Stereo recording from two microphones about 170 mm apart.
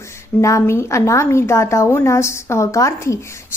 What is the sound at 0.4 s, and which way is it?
A woman's voice, 15° left (ahead or behind).